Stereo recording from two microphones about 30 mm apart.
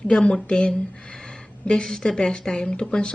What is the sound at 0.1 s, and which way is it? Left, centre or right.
Speech, left.